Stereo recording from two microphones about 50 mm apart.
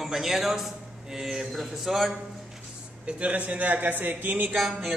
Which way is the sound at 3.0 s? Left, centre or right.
Right.